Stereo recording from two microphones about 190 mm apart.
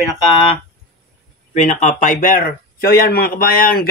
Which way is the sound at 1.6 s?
40° left (ahead or behind).